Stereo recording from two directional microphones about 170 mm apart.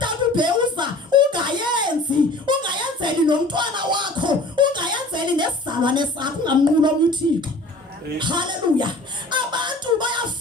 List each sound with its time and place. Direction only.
0.0 s a sound: 25° right (ahead or behind)
2.5 s music: 25° right (ahead or behind)
8.2 s a man's voice: 25° right (ahead or behind)
9.3 s music: 25° right (ahead or behind)